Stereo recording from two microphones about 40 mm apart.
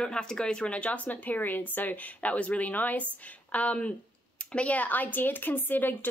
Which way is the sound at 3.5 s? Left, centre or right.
Left.